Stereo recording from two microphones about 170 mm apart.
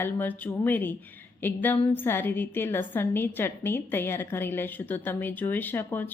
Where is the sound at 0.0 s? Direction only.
10° left (ahead or behind).